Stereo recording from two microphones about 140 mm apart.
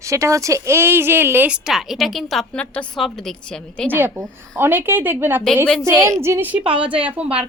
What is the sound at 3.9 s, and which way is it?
A woman's voice, 15° right (ahead or behind).